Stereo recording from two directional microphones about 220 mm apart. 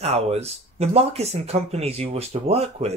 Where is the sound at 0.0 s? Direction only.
30° right (ahead or behind).